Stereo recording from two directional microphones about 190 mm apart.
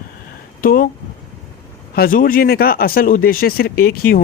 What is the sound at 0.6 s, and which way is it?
Speech, 50° left (ahead or behind).